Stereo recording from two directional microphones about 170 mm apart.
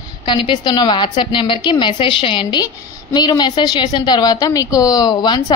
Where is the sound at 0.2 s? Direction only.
30° left (ahead or behind).